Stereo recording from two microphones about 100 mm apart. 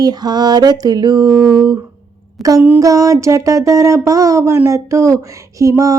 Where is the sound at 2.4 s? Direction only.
Centre (ahead or behind).